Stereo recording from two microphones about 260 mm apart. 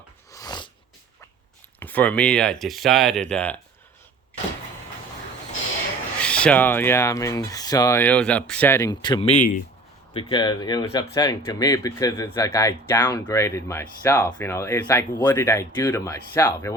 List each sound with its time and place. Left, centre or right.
0.3 s a sound: centre
1.8 s speech: centre
6.1 s speech: centre